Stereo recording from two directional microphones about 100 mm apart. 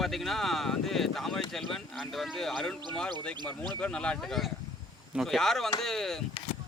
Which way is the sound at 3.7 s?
10° left (ahead or behind).